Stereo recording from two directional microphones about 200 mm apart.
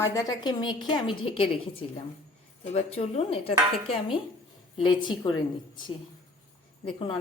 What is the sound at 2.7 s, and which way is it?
A woman's voice, 30° left (ahead or behind).